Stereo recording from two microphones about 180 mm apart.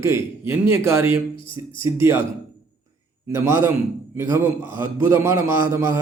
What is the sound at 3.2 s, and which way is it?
A man's voice, 15° right (ahead or behind).